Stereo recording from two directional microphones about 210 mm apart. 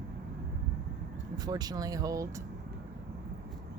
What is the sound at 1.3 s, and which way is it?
Speech, 20° right (ahead or behind).